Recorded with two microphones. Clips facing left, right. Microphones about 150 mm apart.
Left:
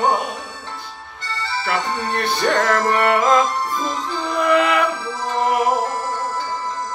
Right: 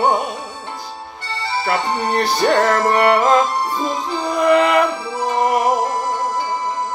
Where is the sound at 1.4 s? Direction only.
15° right (ahead or behind).